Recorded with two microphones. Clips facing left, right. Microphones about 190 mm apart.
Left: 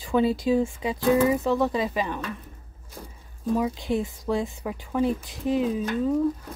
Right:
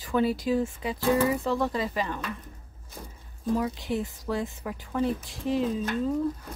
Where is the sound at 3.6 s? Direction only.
20° left (ahead or behind).